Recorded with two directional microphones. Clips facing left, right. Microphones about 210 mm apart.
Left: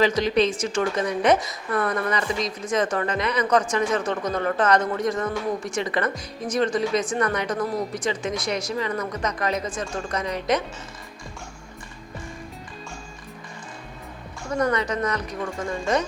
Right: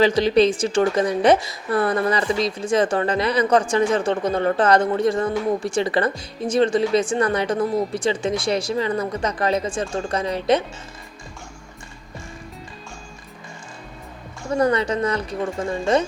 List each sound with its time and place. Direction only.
0.0 s speech: 30° right (ahead or behind)
14.5 s speech: 30° right (ahead or behind)